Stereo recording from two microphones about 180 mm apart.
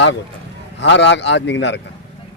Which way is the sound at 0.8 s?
80° left.